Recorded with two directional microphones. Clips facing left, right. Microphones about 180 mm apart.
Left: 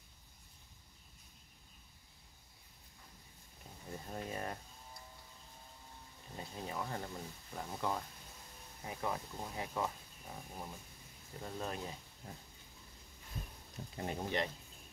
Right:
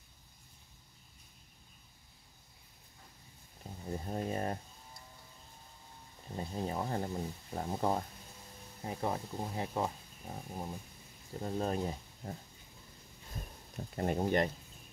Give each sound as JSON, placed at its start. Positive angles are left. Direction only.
{"t": 3.8, "sound": "speech", "side_deg": -35}
{"t": 6.3, "sound": "speech", "side_deg": -35}
{"t": 13.9, "sound": "speech", "side_deg": -50}